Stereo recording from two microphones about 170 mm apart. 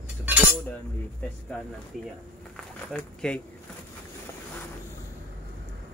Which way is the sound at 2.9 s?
5° left (ahead or behind).